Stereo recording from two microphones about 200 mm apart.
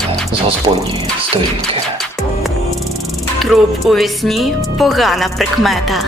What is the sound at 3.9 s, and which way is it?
Speech, centre (ahead or behind).